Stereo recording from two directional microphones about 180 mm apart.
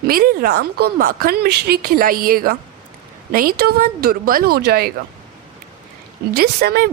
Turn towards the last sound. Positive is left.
turn(degrees=-60)  # may be behind; listen again after turning